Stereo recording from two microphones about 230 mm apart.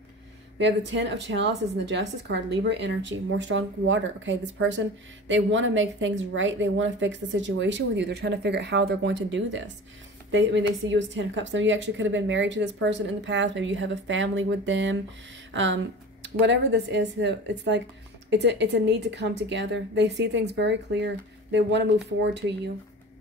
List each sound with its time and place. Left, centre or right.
0.6 s a woman's voice: right